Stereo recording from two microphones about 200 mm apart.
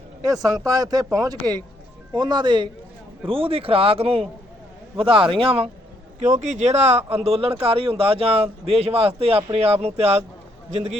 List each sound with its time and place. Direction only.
0.3 s speech: 15° right (ahead or behind)